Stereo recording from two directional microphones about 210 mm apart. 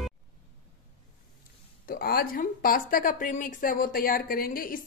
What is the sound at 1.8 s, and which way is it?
A woman's voice, 45° left (ahead or behind).